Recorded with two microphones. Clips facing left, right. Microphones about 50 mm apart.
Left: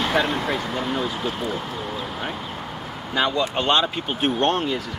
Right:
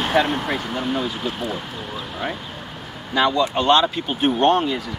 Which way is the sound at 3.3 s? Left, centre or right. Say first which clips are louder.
Right 4 dB; centre.